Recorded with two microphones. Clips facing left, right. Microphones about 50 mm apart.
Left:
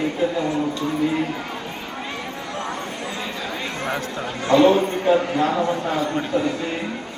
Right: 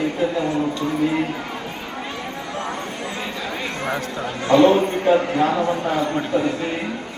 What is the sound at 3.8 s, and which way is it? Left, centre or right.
A man's voice, centre.